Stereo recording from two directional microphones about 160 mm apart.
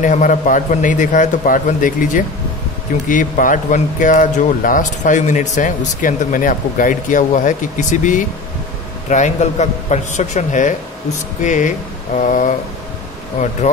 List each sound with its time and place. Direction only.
0.0 s speech: 50° left (ahead or behind)